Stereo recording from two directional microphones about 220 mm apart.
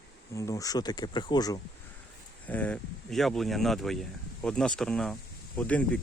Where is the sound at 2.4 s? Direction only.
5° left (ahead or behind).